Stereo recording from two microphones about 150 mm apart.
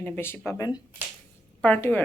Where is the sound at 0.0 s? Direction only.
15° left (ahead or behind).